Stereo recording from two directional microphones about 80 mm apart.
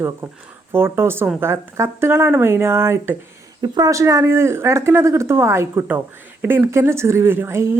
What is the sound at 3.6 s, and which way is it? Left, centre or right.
Speech, right.